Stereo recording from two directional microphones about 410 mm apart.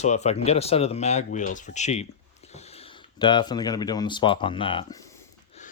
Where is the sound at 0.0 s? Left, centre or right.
Centre.